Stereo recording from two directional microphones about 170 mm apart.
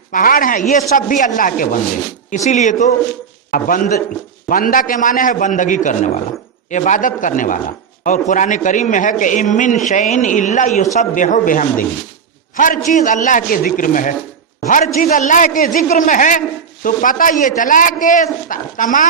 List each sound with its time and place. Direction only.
0.1 s a man's voice: 50° left (ahead or behind)